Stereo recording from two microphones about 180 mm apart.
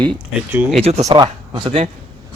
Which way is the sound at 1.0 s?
25° right (ahead or behind).